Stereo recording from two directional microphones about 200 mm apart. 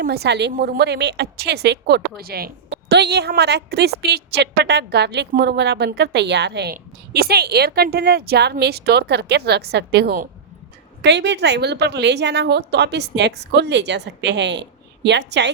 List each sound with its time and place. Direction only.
0.0 s a woman's voice: 55° right (ahead or behind)